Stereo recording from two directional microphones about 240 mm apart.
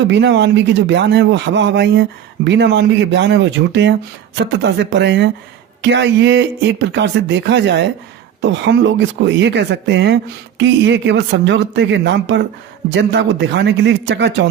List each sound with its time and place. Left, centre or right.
0.1 s a man's voice: right